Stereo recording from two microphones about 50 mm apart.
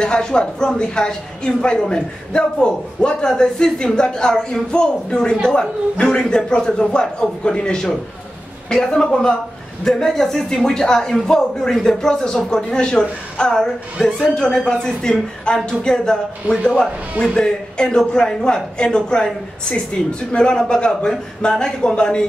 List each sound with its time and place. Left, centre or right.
0.0 s a woman's voice: centre
13.9 s a woman's voice: centre
20.3 s a woman's voice: centre